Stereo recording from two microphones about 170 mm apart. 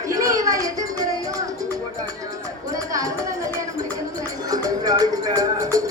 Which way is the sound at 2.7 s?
20° right (ahead or behind).